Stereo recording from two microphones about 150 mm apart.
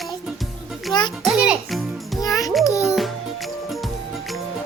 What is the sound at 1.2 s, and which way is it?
Music, centre (ahead or behind).